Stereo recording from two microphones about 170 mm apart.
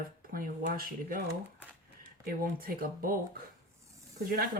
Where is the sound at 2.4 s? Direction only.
55° right (ahead or behind).